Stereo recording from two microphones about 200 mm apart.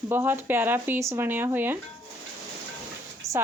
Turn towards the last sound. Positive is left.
turn(degrees=-15)  # may be behind; listen again after turning